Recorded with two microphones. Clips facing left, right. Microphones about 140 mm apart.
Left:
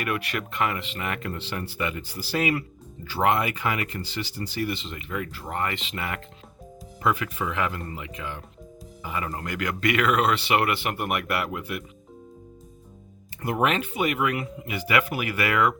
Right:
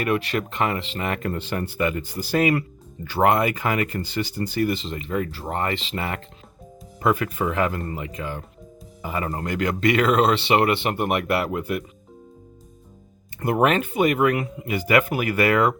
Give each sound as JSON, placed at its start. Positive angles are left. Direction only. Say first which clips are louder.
{"t": 0.0, "sound": "speech", "louder": "right 6 dB", "side_deg": -30}
{"t": 7.0, "sound": "speech", "louder": "right 4 dB", "side_deg": -45}
{"t": 13.4, "sound": "speech", "louder": "right 5 dB", "side_deg": -50}